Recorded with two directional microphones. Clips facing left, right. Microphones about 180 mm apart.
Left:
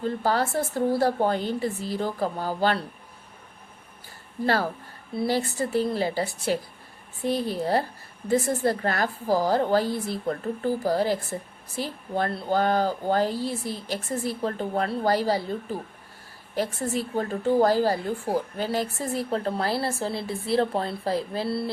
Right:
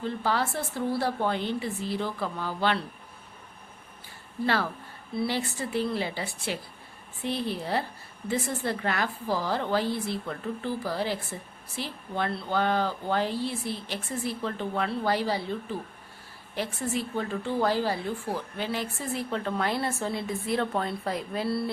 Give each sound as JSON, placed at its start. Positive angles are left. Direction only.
{"t": 0.0, "sound": "a woman's voice", "side_deg": 40}
{"t": 4.4, "sound": "a woman's voice", "side_deg": 40}